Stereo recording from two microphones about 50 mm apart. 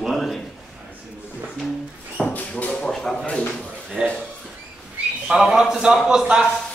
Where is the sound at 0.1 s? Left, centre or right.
Centre.